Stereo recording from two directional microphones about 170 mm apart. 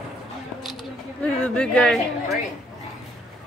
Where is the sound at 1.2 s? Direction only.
5° left (ahead or behind).